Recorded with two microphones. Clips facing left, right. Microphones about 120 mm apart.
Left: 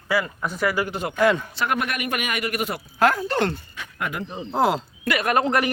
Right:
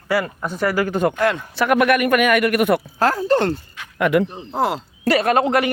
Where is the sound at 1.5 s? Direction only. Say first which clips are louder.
Right 9 dB; 65° right (ahead or behind).